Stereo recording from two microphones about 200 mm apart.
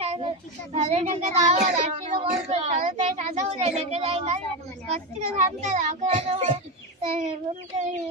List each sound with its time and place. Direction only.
0.0 s child singing: 30° right (ahead or behind)
0.7 s a child's voice: 35° right (ahead or behind)